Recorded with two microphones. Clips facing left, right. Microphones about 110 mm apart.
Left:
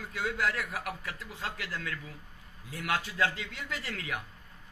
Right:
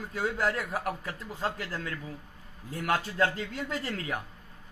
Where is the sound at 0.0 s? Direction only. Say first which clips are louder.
Right 2 dB; 35° right (ahead or behind).